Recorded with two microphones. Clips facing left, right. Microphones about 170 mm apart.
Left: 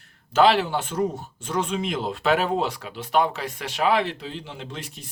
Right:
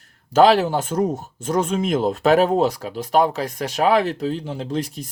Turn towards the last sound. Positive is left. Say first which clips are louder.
# right 11 dB
turn(degrees=-40)  # may be behind; listen again after turning